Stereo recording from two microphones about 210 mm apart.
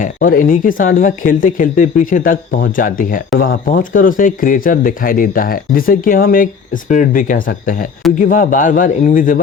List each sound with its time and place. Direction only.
0.0 s speech: 40° left (ahead or behind)